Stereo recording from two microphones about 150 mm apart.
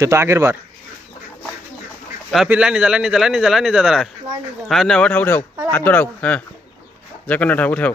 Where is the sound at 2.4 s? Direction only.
5° right (ahead or behind); by 7.9 s 10° left (ahead or behind).